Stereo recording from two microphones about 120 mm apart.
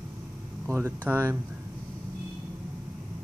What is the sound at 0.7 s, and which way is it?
Speech, 20° right (ahead or behind).